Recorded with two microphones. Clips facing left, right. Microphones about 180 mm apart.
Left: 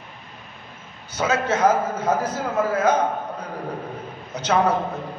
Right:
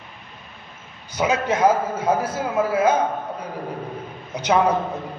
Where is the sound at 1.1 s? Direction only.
15° right (ahead or behind).